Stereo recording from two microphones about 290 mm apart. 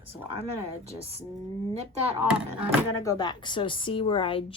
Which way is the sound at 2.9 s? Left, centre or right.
Centre.